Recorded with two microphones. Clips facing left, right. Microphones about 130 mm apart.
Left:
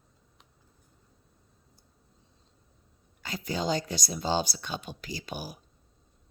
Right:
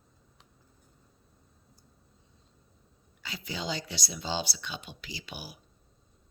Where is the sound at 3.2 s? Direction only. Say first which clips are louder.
Left 6 dB; 45° left (ahead or behind).